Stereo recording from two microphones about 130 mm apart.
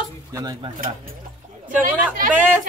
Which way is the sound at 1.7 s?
90° right.